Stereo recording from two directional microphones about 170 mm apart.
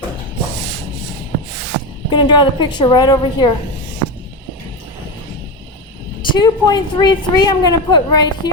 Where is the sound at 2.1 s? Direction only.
25° left (ahead or behind).